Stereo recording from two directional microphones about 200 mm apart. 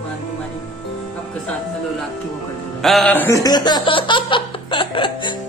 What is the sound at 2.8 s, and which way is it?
Speech, centre (ahead or behind).